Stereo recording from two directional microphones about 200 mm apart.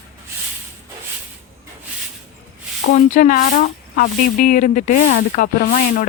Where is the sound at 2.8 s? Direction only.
45° left (ahead or behind).